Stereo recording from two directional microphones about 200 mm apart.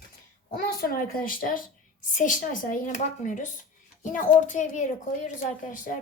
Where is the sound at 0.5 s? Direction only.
45° left (ahead or behind).